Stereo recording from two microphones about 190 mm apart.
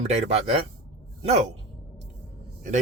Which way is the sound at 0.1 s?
35° right (ahead or behind).